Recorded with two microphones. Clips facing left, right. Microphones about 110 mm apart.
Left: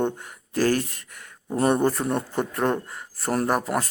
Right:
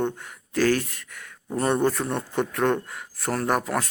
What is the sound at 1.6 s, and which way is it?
A man's voice, 15° left (ahead or behind).